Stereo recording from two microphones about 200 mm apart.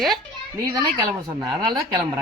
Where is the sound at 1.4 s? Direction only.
20° right (ahead or behind).